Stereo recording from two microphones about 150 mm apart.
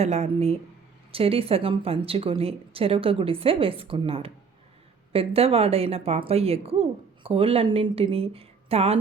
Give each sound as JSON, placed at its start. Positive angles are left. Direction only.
{"t": 0.0, "sound": "speech", "side_deg": -45}